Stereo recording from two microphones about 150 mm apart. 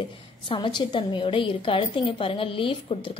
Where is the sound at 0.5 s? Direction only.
30° left (ahead or behind).